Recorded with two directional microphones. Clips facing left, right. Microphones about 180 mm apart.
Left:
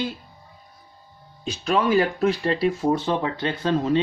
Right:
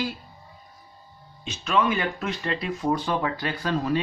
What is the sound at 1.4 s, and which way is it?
Speech, 35° left (ahead or behind).